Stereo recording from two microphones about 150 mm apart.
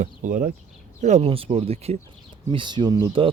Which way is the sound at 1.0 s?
45° right (ahead or behind).